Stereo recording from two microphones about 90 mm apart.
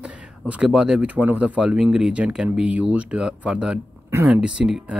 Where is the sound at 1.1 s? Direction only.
20° right (ahead or behind).